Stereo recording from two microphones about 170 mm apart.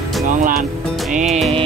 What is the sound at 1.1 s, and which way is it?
Music, 45° right (ahead or behind).